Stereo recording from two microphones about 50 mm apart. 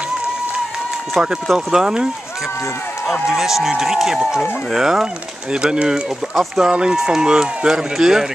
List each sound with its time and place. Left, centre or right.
1.5 s speech: centre
3.3 s speech: centre